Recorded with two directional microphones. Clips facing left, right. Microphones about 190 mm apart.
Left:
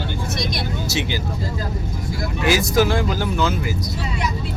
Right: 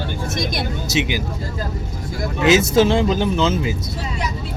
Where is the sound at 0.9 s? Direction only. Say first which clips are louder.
Right 5 dB; 20° right (ahead or behind).